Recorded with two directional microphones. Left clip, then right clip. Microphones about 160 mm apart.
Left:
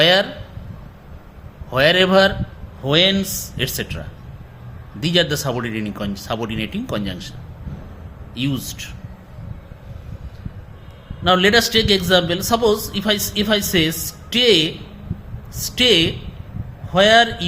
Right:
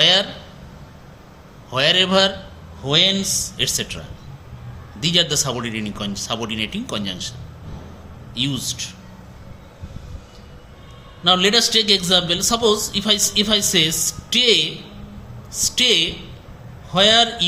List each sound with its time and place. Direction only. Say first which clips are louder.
0.0 s a man's voice: left 1 dB; 50° left (ahead or behind)
1.7 s a man's voice: left 2 dB; 45° left (ahead or behind)
8.4 s speech: right 2 dB; 55° left (ahead or behind)
11.2 s a man's voice: left 1 dB; 50° left (ahead or behind)